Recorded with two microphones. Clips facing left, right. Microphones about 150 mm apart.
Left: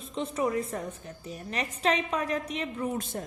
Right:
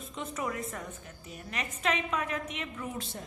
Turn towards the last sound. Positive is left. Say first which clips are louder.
# left 6 dB
turn(degrees=35)  # may be behind; listen again after turning